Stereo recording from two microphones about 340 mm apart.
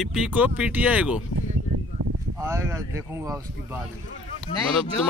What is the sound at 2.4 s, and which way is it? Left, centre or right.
Speech, centre.